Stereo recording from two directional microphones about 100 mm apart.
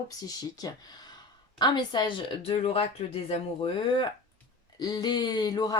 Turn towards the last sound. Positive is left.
turn(degrees=40)  # may be behind; listen again after turning